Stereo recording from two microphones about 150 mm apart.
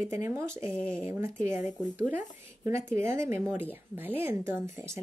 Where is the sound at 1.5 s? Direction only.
55° left (ahead or behind).